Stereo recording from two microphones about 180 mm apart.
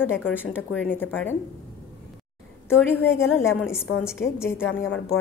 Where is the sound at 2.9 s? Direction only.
10° left (ahead or behind).